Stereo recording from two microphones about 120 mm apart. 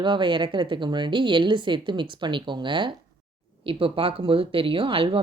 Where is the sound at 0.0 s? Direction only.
40° right (ahead or behind).